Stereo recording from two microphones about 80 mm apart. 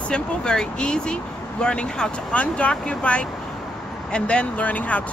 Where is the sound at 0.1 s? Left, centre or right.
Centre.